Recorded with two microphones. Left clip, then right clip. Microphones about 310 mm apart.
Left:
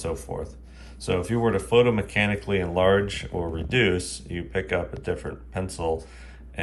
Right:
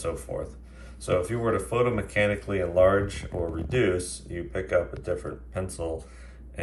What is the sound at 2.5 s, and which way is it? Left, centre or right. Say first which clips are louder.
Speech: even; right.